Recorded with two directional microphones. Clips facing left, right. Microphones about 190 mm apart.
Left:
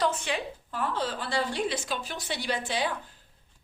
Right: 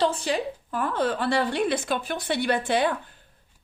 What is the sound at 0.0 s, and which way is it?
A woman's voice, 35° right (ahead or behind).